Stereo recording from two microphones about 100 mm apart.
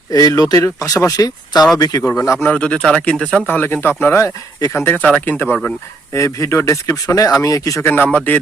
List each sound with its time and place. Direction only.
0.1 s speech: 40° left (ahead or behind)
2.4 s speech: 10° left (ahead or behind)
6.1 s speech: 30° left (ahead or behind)
7.9 s speech: 15° left (ahead or behind)